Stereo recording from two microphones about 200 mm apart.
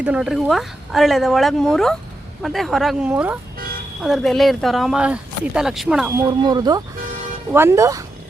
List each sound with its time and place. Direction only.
0.0 s speech: 5° right (ahead or behind)
6.1 s speech: 20° right (ahead or behind)